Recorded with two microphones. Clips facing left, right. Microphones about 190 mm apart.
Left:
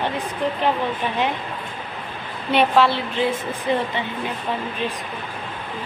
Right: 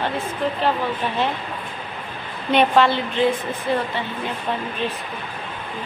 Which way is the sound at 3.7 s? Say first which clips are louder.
Left 1 dB; 20° left (ahead or behind).